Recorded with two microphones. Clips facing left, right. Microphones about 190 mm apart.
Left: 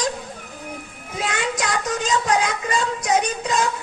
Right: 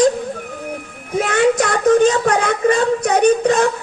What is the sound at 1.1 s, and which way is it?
Speech, 55° right (ahead or behind).